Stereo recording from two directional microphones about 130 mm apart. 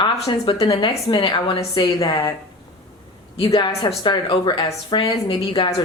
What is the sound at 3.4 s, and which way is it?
Speech, 35° left (ahead or behind).